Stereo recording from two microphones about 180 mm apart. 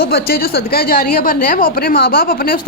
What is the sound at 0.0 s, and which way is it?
A woman's voice, 60° left (ahead or behind).